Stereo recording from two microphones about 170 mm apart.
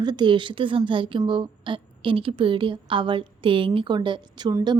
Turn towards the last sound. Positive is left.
turn(degrees=-25)  # may be behind; listen again after turning